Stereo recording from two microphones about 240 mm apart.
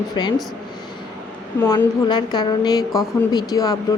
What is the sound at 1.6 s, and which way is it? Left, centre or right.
Speech, centre.